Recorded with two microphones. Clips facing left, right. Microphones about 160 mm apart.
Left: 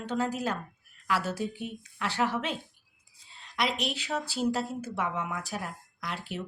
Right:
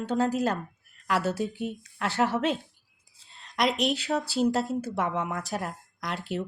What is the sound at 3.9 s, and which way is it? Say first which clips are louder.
Speech: right 6 dB; 40° right (ahead or behind).